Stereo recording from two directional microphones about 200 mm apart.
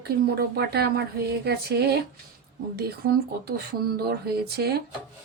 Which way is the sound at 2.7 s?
50° right (ahead or behind).